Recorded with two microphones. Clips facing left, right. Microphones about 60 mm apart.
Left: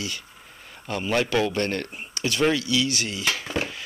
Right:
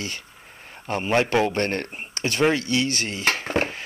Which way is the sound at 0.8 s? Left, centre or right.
Right.